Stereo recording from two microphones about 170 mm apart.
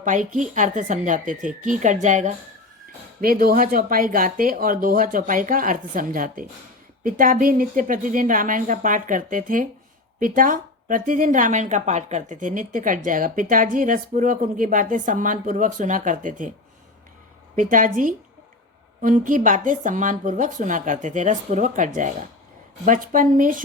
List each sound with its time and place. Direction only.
0.0 s a woman's voice: 50° right (ahead or behind)
3.2 s a woman's voice: 55° right (ahead or behind)
17.6 s a woman's voice: 50° right (ahead or behind)